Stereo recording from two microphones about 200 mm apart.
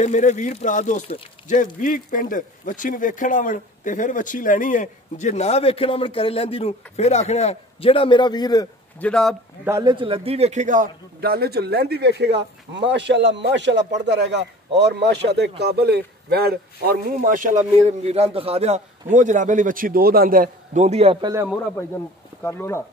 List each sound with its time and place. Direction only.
0.0 s speech: 35° left (ahead or behind); by 8.6 s 20° left (ahead or behind)
9.0 s a man's voice: 5° left (ahead or behind)
9.7 s a man's voice: 20° right (ahead or behind)
22.4 s speech: 10° left (ahead or behind)